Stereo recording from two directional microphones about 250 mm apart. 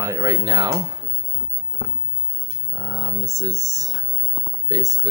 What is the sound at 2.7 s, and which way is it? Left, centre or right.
Speech, centre.